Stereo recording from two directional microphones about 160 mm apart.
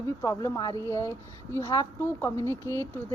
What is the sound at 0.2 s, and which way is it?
A woman's voice, 20° left (ahead or behind).